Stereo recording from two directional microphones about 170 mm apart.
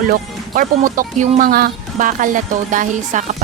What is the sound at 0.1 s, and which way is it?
Speech, 50° right (ahead or behind).